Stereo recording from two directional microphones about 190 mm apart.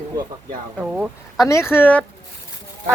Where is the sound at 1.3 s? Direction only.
15° left (ahead or behind).